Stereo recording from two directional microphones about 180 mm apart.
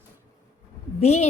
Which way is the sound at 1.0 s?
35° left (ahead or behind).